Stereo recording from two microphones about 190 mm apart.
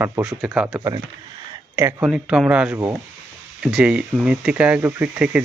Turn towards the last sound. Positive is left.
turn(degrees=-5)  # may be behind; listen again after turning